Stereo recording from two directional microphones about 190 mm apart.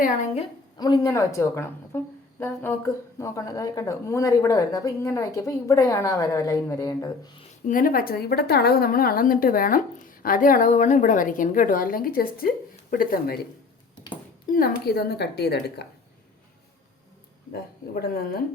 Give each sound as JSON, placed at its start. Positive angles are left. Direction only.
{"t": 0.0, "sound": "a woman's voice", "side_deg": 40}
{"t": 0.8, "sound": "a woman's voice", "side_deg": 20}
{"t": 7.7, "sound": "a woman's voice", "side_deg": 45}
{"t": 14.5, "sound": "speech", "side_deg": 50}
{"t": 17.5, "sound": "a woman's voice", "side_deg": 55}